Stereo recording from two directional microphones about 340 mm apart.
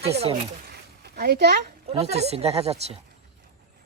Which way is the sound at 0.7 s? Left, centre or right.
Right.